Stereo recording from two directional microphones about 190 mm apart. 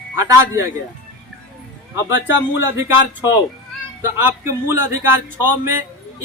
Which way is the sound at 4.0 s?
10° right (ahead or behind).